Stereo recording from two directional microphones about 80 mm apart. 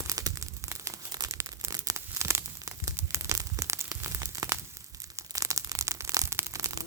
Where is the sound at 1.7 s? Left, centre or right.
Right.